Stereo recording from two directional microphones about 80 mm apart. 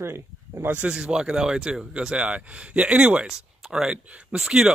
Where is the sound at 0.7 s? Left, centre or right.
Centre.